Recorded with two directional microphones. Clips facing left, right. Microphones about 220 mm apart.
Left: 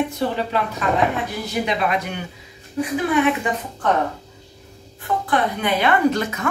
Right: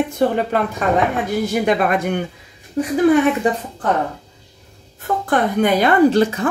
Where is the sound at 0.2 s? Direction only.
50° right (ahead or behind).